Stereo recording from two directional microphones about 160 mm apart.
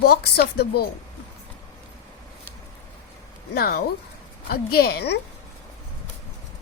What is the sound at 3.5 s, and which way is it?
A woman's voice, 70° left (ahead or behind).